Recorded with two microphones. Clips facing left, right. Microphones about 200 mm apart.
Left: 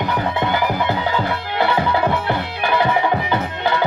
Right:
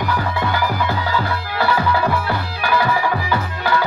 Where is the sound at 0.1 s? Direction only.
20° left (ahead or behind).